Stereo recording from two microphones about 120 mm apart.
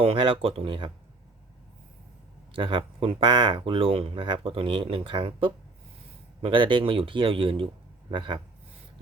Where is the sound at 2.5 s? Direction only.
45° right (ahead or behind).